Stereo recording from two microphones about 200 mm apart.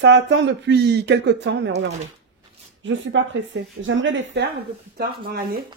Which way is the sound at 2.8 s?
70° right (ahead or behind).